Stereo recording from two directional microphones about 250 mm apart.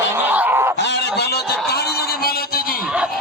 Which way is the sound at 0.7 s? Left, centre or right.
Left.